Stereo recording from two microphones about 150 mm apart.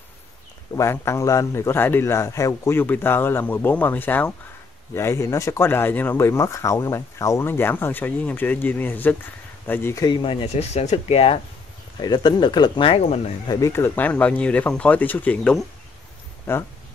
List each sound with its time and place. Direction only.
0.7 s speech: 20° left (ahead or behind)
10.0 s speech: 30° left (ahead or behind)
12.0 s speech: 30° left (ahead or behind)
13.5 s speech: 20° left (ahead or behind)